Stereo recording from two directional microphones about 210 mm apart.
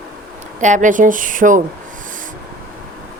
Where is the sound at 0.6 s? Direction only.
35° right (ahead or behind).